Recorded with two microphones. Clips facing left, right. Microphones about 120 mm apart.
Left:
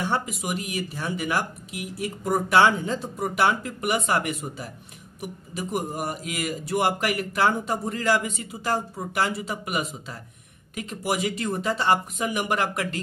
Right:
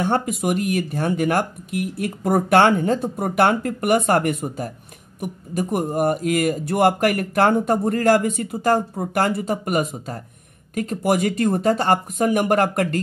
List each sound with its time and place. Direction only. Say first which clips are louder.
0.0 s speech: right 6 dB; 50° right (ahead or behind)